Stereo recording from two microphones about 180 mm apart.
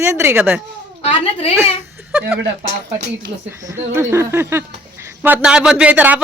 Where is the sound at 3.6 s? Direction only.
15° right (ahead or behind).